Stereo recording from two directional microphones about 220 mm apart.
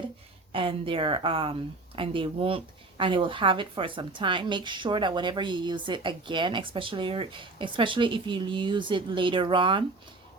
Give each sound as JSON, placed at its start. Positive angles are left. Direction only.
{"t": 0.5, "sound": "a woman's voice", "side_deg": -25}